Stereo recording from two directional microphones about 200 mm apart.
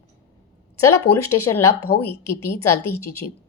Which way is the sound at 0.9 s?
90° left.